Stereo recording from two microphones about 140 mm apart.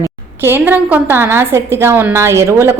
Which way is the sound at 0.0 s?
15° right (ahead or behind).